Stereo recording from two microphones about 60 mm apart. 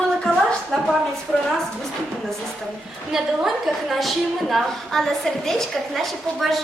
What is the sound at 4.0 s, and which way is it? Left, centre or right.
A woman's voice, centre.